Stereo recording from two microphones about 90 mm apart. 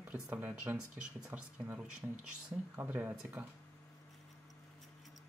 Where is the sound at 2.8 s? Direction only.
20° right (ahead or behind).